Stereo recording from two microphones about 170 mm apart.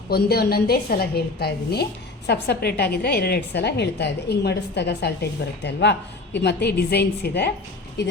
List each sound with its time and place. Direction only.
0.1 s a woman's voice: 65° left (ahead or behind)